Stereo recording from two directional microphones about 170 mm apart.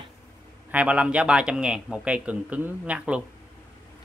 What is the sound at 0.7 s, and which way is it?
A man's voice, 10° right (ahead or behind).